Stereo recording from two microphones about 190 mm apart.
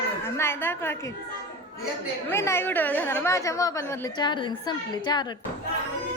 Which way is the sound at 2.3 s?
15° left (ahead or behind).